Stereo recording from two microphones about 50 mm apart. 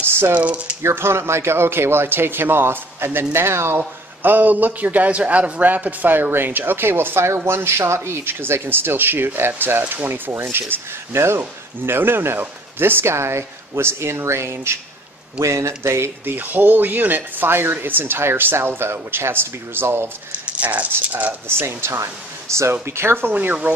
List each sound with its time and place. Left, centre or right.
0.3 s speech: right
0.8 s speech: right
3.3 s speech: right
4.2 s a man's voice: right
6.3 s speech: right
16.3 s speech: right
20.4 s a man's voice: right
21.5 s speech: right
22.7 s speech: right
23.3 s a man's voice: right